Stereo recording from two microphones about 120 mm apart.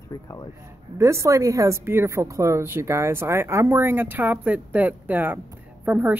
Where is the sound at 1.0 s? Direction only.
25° right (ahead or behind).